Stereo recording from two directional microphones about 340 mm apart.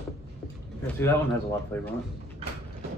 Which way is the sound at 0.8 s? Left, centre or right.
Centre.